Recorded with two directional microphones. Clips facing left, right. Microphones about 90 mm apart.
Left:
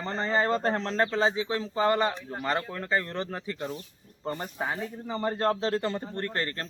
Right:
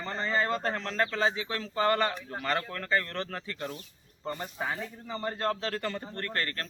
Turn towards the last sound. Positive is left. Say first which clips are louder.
# left 2 dB
turn(degrees=25)  # may be behind; listen again after turning